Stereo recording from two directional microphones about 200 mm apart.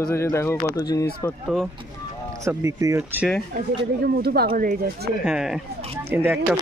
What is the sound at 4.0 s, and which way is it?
Speech, 50° right (ahead or behind).